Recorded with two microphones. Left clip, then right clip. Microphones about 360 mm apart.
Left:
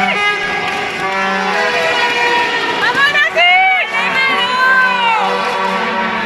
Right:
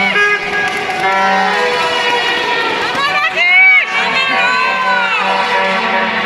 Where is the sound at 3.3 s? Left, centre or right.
Left.